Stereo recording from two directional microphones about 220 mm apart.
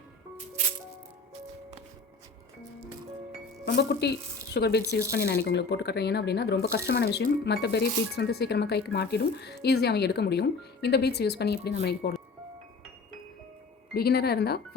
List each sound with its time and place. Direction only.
3.7 s speech: 50° left (ahead or behind)
13.9 s speech: 45° left (ahead or behind)